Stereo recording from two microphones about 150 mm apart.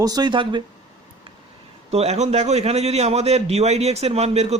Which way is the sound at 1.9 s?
45° right (ahead or behind).